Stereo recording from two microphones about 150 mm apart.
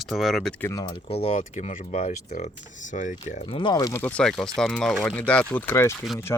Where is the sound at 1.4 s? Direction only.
55° left (ahead or behind).